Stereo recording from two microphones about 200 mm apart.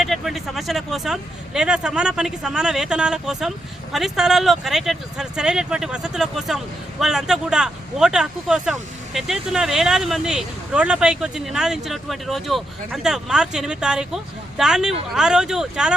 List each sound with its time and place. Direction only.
0.0 s speech: centre (ahead or behind)